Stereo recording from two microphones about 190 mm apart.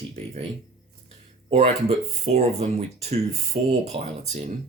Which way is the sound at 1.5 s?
30° right (ahead or behind).